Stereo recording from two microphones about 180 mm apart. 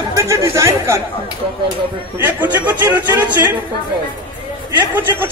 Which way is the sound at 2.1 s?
10° right (ahead or behind).